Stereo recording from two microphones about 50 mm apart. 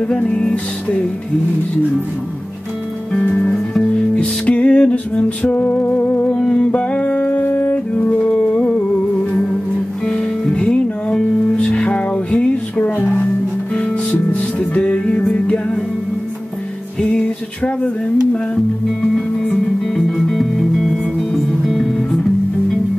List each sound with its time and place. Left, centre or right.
0.2 s speech: left
3.1 s music: centre
4.1 s music: left
5.6 s music: left
6.2 s music: centre
10.0 s music: centre
14.1 s music: left
17.6 s speech: left
20.0 s music: centre